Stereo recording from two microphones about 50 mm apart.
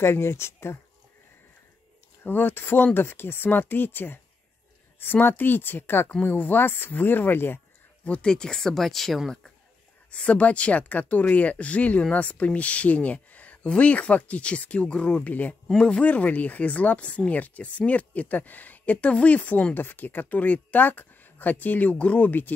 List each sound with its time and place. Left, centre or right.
0.0 s speech: left
2.2 s speech: left
8.0 s speech: left; by 9.2 s centre
10.1 s speech: left
19.7 s speech: left